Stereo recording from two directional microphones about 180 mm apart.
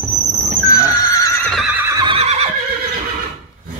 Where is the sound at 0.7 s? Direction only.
20° left (ahead or behind).